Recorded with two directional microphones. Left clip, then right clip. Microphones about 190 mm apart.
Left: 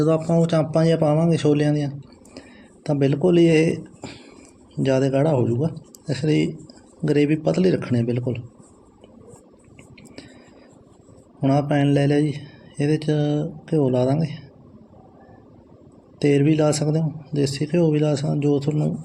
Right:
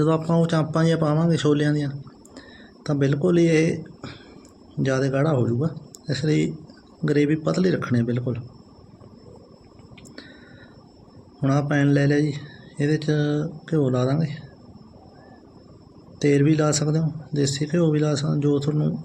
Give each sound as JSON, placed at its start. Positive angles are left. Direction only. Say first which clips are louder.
{"t": 0.0, "sound": "speech", "louder": "left 2 dB", "side_deg": 20}
{"t": 11.3, "sound": "speech", "louder": "left 2 dB", "side_deg": 20}
{"t": 16.2, "sound": "speech", "louder": "left 2 dB", "side_deg": 25}